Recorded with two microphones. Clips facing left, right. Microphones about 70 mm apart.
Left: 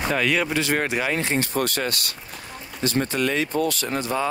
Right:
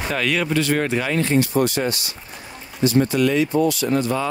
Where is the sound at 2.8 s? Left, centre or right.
Left.